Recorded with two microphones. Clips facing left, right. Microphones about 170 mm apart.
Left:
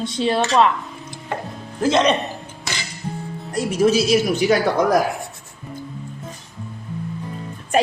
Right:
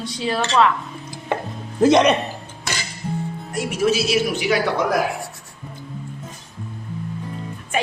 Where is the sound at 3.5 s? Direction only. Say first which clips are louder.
Left 3 dB; 35° left (ahead or behind).